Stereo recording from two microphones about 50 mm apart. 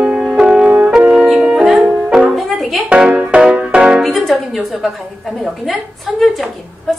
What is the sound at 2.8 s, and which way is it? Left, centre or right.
Music, centre.